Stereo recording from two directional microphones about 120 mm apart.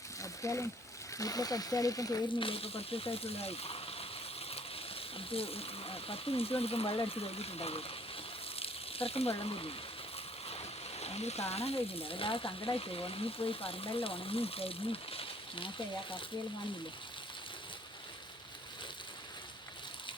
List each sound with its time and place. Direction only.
0.2 s a sound: 25° left (ahead or behind)
1.2 s speech: 30° left (ahead or behind)
2.4 s speech: 50° left (ahead or behind)